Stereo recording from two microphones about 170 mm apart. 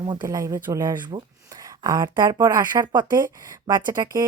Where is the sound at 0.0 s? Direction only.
25° right (ahead or behind).